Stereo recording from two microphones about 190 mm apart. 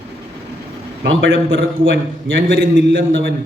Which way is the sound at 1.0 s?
60° right (ahead or behind).